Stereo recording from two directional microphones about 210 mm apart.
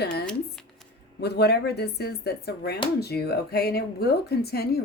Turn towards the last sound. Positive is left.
turn(degrees=50)  # may be behind; listen again after turning